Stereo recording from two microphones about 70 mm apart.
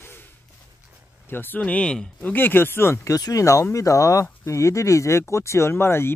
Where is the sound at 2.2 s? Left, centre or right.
Left.